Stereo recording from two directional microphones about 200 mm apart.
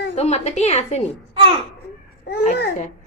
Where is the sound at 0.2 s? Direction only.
35° left (ahead or behind).